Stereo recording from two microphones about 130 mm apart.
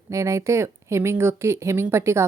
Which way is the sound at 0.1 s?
25° right (ahead or behind).